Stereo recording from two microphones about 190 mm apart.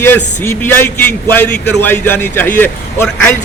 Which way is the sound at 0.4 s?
10° left (ahead or behind).